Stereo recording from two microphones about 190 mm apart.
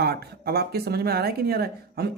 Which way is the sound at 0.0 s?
55° right (ahead or behind).